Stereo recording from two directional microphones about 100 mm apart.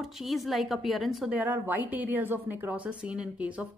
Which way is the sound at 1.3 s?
15° right (ahead or behind).